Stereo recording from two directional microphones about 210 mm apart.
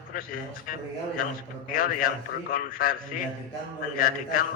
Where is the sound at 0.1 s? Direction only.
40° left (ahead or behind).